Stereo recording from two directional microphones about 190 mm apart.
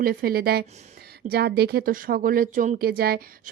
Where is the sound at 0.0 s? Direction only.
50° right (ahead or behind).